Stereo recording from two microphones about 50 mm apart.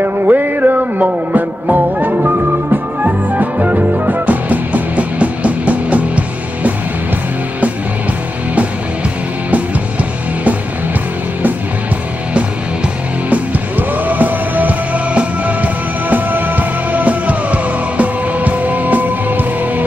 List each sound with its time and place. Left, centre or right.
0.0 s music: right
13.3 s music: right